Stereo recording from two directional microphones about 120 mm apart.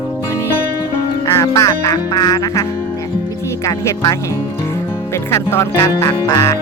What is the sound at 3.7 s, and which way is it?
Quack, 30° left (ahead or behind).